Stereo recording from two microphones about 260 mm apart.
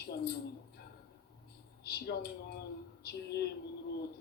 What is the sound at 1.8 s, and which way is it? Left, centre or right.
Speech, left.